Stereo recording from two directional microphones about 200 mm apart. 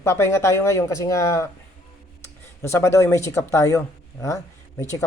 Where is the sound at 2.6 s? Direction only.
15° left (ahead or behind).